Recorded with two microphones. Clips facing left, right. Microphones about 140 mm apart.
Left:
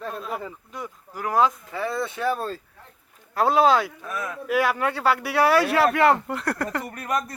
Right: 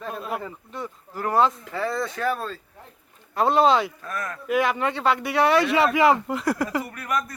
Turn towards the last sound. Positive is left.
turn(degrees=35)  # may be behind; listen again after turning